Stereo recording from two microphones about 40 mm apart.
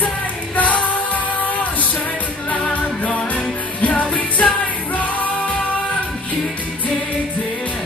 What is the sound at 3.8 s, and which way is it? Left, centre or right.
Music, left.